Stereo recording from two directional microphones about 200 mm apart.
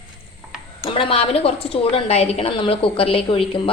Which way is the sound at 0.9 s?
25° left (ahead or behind).